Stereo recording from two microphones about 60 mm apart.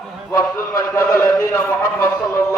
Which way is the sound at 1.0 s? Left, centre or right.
Left.